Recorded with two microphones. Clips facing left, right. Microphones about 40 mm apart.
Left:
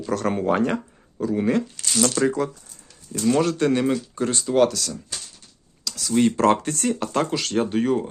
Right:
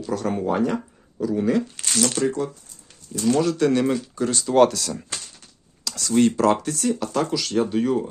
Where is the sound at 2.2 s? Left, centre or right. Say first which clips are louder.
Left 2 dB; left.